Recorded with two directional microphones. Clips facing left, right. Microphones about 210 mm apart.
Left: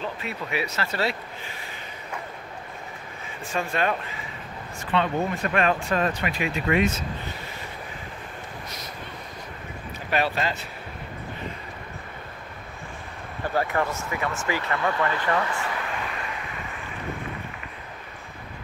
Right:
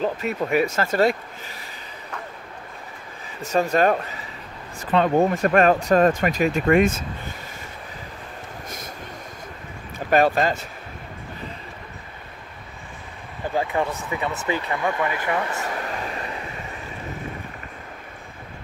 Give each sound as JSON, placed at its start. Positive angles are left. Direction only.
{"t": 0.0, "sound": "speech", "side_deg": -45}
{"t": 3.4, "sound": "speech", "side_deg": -40}
{"t": 9.9, "sound": "speech", "side_deg": -45}
{"t": 13.6, "sound": "speech", "side_deg": -15}
{"t": 15.5, "sound": "a sound", "side_deg": -40}